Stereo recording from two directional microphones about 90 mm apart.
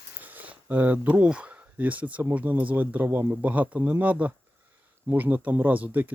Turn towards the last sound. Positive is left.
turn(degrees=-20)  # may be behind; listen again after turning